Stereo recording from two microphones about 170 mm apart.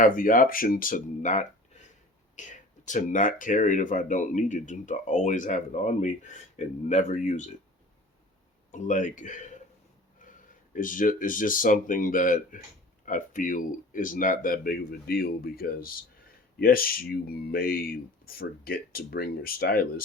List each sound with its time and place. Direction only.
0.0 s speech: 50° left (ahead or behind)
8.7 s speech: 45° left (ahead or behind)
10.2 s a sound: 50° left (ahead or behind)
10.8 s speech: 50° left (ahead or behind)